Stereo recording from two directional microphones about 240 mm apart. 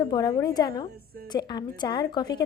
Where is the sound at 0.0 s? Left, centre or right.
Centre.